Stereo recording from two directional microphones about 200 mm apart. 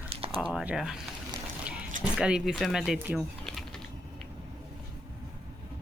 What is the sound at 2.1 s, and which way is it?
Speech, 5° right (ahead or behind).